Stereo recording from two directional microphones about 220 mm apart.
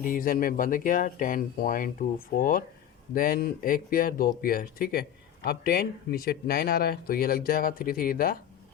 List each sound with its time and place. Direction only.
0.0 s speech: 40° left (ahead or behind)